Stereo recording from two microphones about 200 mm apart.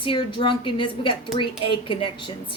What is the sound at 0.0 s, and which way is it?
A woman's voice, 25° left (ahead or behind).